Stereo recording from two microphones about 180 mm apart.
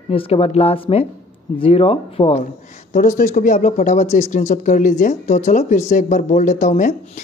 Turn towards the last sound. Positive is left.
turn(degrees=45)  # may be behind; listen again after turning